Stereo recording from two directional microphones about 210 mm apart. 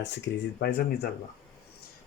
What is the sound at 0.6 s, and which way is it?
Speech, 50° left (ahead or behind).